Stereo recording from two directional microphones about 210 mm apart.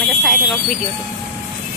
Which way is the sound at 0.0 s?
Centre (ahead or behind).